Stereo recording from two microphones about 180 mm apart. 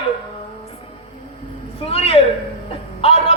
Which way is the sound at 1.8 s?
30° left (ahead or behind).